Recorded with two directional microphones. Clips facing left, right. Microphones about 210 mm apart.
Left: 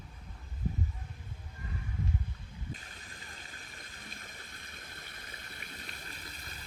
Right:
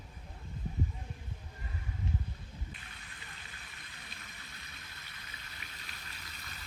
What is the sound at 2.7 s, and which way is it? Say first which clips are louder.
Water: left 6 dB; 40° left (ahead or behind).